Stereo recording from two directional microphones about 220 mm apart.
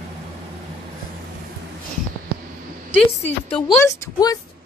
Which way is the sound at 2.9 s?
25° left (ahead or behind).